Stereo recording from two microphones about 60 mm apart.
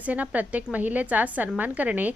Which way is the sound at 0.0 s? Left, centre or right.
Right.